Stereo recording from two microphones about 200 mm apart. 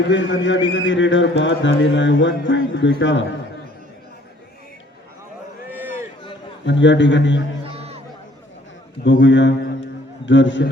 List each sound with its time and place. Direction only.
0.1 s a man's voice: 65° left (ahead or behind)
6.7 s a man's voice: 65° left (ahead or behind)
7.6 s music: 30° right (ahead or behind)
9.2 s a man's voice: 65° left (ahead or behind)